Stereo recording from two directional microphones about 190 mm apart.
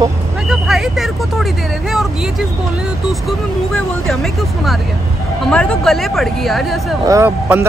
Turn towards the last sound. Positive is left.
turn(degrees=-15)  # may be behind; listen again after turning